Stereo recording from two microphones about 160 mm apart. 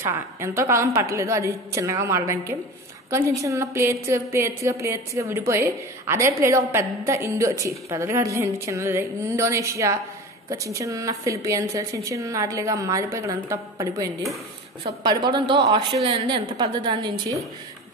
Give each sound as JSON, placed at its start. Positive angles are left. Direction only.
{"t": 0.1, "sound": "a woman's voice", "side_deg": -15}
{"t": 14.8, "sound": "speech", "side_deg": -30}